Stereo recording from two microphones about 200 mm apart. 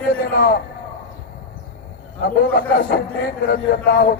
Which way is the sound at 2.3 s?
50° left (ahead or behind).